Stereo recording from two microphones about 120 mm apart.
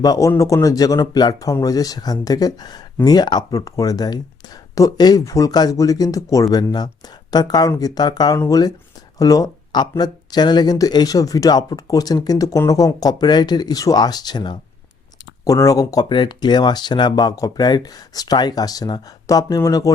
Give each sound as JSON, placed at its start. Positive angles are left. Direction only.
{"t": 0.0, "sound": "a man's voice", "side_deg": 30}